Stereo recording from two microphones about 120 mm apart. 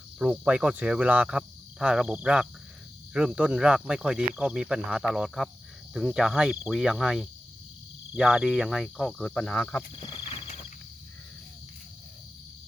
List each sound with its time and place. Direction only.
0.2 s speech: 10° right (ahead or behind); by 9.8 s 10° left (ahead or behind)
9.9 s wild animals: 45° left (ahead or behind)